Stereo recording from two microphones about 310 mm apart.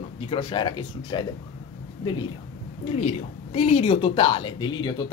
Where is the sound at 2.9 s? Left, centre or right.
Left.